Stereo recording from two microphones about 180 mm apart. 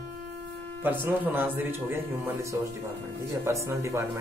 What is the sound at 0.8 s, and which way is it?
Speech, 10° right (ahead or behind).